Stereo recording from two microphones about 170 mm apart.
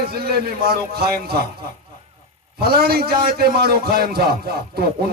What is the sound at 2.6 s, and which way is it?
A man's voice, 65° right (ahead or behind).